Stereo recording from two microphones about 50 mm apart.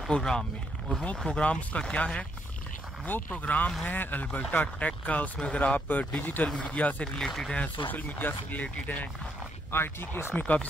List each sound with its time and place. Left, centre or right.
0.1 s speech: centre
3.1 s speech: left
6.5 s speech: left
7.2 s speech: centre
7.5 s speech: left
9.7 s speech: left
10.3 s speech: left